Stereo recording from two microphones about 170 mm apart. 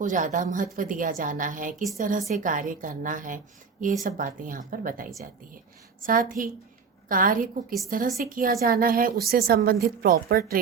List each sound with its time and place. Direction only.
0.0 s a woman's voice: 50° right (ahead or behind)